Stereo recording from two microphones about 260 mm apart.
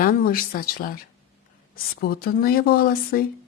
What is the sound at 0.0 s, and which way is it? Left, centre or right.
Speech, left.